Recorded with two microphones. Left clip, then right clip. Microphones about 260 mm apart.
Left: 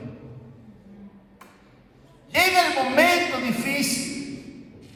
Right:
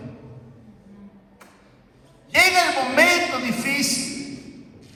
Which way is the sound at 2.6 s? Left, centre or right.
Right.